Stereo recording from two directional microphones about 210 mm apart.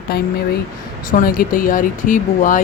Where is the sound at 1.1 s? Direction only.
40° left (ahead or behind).